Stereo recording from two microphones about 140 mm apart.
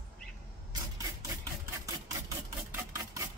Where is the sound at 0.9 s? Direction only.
25° right (ahead or behind).